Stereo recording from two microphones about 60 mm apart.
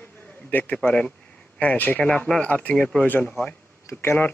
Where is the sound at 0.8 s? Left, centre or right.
Centre.